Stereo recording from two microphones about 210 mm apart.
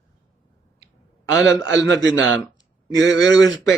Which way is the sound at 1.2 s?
15° left (ahead or behind).